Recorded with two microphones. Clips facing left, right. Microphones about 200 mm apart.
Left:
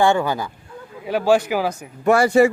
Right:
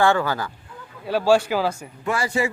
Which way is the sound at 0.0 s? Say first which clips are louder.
Left 2 dB; 15° left (ahead or behind).